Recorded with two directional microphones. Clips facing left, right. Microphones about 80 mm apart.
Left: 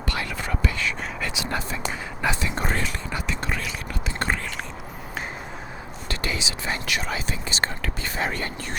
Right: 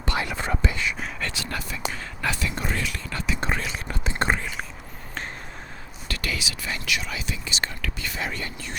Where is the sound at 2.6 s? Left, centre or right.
Left.